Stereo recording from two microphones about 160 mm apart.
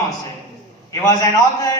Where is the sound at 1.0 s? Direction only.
20° left (ahead or behind).